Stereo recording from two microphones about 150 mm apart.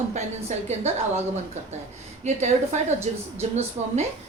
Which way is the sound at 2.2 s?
50° right (ahead or behind).